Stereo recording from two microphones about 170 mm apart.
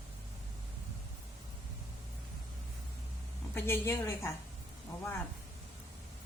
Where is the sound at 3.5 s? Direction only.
15° left (ahead or behind).